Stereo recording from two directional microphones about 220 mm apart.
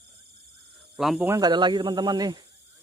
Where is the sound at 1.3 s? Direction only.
20° right (ahead or behind).